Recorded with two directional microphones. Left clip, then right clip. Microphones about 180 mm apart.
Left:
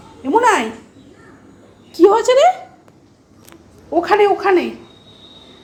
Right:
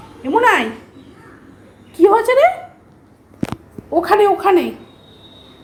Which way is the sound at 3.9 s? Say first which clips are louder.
Even; 5° left (ahead or behind).